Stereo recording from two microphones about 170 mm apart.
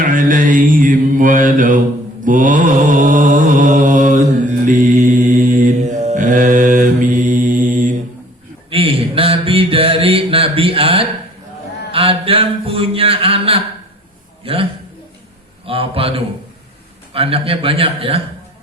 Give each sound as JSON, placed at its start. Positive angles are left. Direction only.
{"t": 0.0, "sound": "mantra", "side_deg": -50}
{"t": 8.7, "sound": "a sound", "side_deg": -35}
{"t": 17.2, "sound": "a man's voice", "side_deg": -35}